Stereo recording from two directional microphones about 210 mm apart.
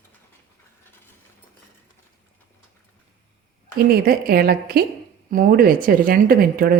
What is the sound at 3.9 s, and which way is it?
A woman's voice, 45° right (ahead or behind).